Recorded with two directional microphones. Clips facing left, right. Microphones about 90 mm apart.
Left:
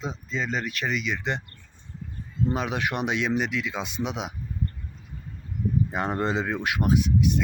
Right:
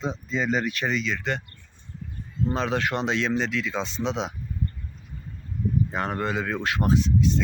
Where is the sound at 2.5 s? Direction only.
10° left (ahead or behind).